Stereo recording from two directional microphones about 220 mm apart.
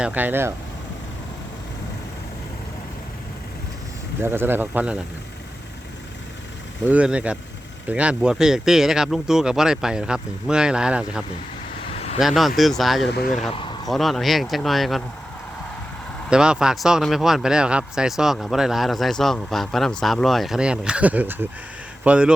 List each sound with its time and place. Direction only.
0.0 s speech: 5° right (ahead or behind)
4.2 s speech: 10° right (ahead or behind)
6.8 s speech: 5° right (ahead or behind)
12.2 s speech: centre (ahead or behind)
13.1 s speech: 40° left (ahead or behind)
13.8 s speech: centre (ahead or behind)
16.3 s speech: 5° right (ahead or behind)